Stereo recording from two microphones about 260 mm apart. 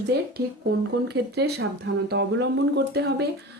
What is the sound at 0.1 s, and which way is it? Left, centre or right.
A woman's voice, right.